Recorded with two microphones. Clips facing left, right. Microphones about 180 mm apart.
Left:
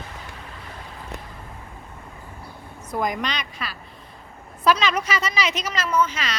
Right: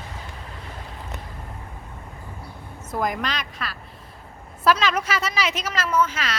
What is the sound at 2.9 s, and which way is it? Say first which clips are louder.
Speech: even; centre (ahead or behind).